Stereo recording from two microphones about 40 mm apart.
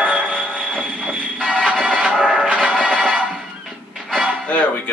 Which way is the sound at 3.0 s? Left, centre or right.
Centre.